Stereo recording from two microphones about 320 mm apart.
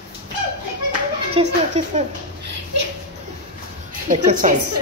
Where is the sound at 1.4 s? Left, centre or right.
Centre.